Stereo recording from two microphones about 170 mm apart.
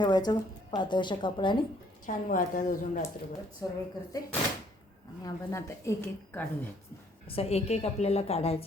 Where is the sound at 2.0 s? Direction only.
50° left (ahead or behind).